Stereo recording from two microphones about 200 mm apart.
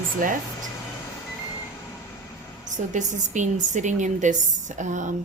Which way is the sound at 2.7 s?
40° right (ahead or behind).